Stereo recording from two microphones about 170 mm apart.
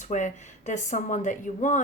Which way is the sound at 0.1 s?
45° left (ahead or behind).